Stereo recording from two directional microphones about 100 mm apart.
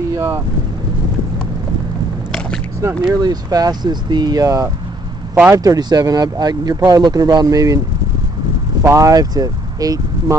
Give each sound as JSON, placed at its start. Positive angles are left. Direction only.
{"t": 2.8, "sound": "speech", "side_deg": -40}
{"t": 8.8, "sound": "speech", "side_deg": -35}